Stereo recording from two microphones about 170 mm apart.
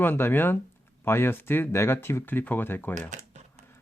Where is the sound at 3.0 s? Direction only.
45° right (ahead or behind).